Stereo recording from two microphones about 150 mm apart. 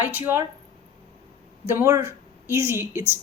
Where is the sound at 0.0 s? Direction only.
15° right (ahead or behind).